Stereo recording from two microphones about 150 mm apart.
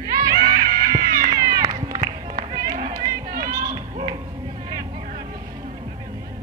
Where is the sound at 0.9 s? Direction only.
25° right (ahead or behind).